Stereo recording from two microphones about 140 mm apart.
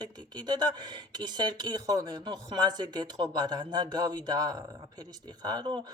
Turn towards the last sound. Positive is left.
turn(degrees=-35)  # may be behind; listen again after turning